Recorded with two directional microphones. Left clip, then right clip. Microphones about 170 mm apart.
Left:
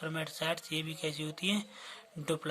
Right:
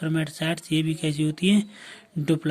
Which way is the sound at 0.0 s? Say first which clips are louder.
Right 8 dB; 10° right (ahead or behind).